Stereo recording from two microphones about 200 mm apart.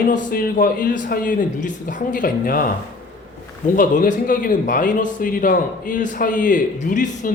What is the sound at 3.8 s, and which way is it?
Speech, 40° left (ahead or behind).